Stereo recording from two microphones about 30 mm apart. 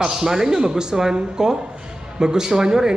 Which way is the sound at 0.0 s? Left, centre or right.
Centre.